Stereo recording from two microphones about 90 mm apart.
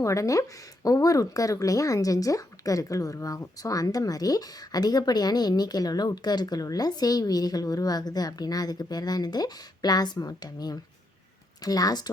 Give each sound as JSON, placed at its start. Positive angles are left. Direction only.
{"t": 0.0, "sound": "speech", "side_deg": 35}